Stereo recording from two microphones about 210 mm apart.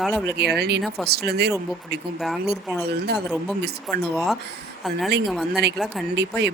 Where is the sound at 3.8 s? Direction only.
Centre (ahead or behind).